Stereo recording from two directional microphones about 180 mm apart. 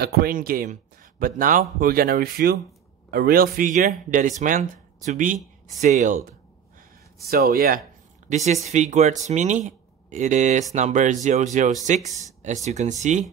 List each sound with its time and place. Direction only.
0.0 s speech: 55° right (ahead or behind)
7.2 s speech: 60° right (ahead or behind)
8.6 s speech: 40° right (ahead or behind)